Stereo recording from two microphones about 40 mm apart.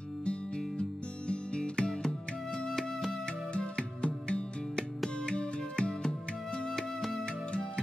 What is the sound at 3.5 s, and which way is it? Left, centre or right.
Music, left.